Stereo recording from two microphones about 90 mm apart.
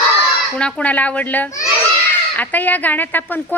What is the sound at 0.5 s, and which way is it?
A child's voice, 15° left (ahead or behind).